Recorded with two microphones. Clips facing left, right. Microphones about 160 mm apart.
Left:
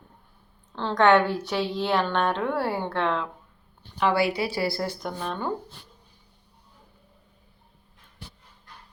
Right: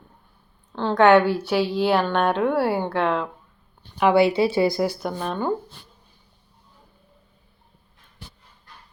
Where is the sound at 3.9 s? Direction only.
15° right (ahead or behind).